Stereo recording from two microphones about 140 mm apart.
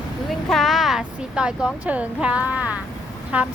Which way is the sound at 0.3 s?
Centre (ahead or behind).